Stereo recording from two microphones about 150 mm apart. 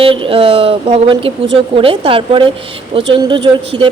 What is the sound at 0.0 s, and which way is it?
Speech, 35° right (ahead or behind).